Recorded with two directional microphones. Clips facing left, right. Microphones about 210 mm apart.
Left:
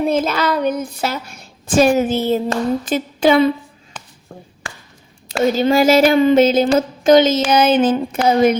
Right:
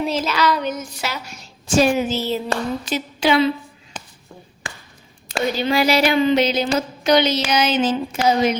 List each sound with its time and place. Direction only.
0.0 s speech: 55° left (ahead or behind)
5.4 s speech: 45° left (ahead or behind)